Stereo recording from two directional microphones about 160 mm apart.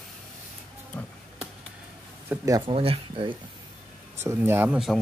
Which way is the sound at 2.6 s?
35° right (ahead or behind).